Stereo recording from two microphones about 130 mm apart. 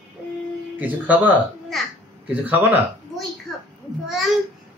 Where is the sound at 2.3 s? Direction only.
15° right (ahead or behind).